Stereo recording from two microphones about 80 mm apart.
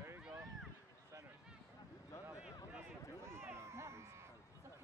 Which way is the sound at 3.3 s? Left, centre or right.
Right.